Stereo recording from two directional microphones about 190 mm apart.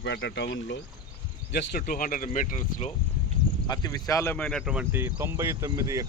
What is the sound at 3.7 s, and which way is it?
Speech, 20° left (ahead or behind).